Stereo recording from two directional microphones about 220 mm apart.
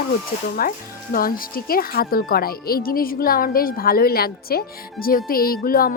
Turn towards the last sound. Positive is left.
turn(degrees=40)  # may be behind; listen again after turning